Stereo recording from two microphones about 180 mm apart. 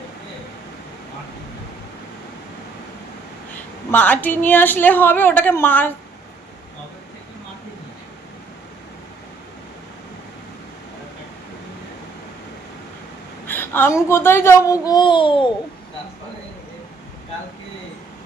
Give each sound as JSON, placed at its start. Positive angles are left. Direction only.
{"t": 3.9, "sound": "a woman's voice", "side_deg": 10}
{"t": 13.5, "sound": "a sound", "side_deg": 10}
{"t": 14.1, "sound": "a woman's voice", "side_deg": 15}